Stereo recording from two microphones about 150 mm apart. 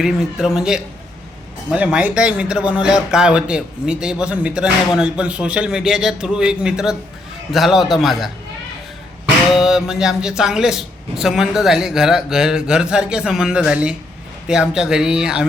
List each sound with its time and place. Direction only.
0.0 s speech: 5° right (ahead or behind)
9.6 s speech: 5° right (ahead or behind)